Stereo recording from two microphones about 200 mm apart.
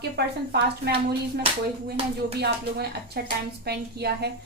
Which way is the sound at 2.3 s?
55° right (ahead or behind).